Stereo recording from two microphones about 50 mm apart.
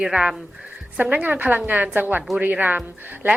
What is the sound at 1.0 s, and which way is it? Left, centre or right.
A woman's voice, right.